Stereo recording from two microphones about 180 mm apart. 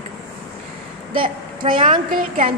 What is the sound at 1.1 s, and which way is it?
Speech, 30° right (ahead or behind).